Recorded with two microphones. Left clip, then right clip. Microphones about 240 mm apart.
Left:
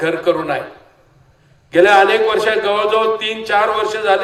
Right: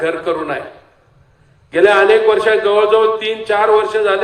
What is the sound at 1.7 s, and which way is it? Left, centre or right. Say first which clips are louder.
A man's voice: even; left.